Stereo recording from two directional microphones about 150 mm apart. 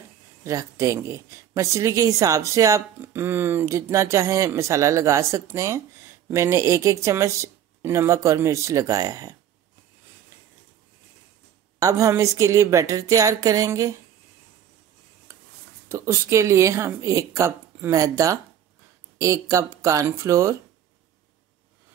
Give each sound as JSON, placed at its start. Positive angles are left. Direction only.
{"t": 0.4, "sound": "speech", "side_deg": -20}
{"t": 11.8, "sound": "speech", "side_deg": -20}
{"t": 15.3, "sound": "a sound", "side_deg": -20}
{"t": 15.9, "sound": "speech", "side_deg": -15}